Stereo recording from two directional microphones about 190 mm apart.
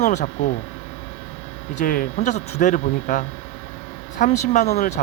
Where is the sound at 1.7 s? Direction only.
50° left (ahead or behind).